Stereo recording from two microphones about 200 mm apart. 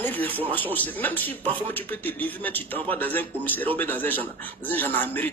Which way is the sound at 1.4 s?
25° right (ahead or behind).